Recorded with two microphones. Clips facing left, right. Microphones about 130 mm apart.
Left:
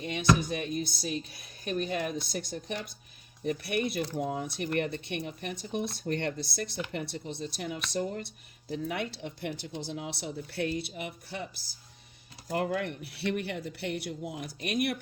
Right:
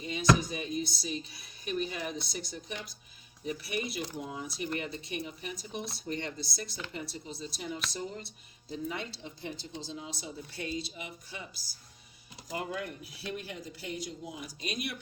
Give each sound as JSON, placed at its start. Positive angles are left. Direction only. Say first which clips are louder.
{"t": 0.0, "sound": "speech", "louder": "even", "side_deg": 60}
{"t": 12.5, "sound": "speech", "louder": "left 6 dB", "side_deg": 65}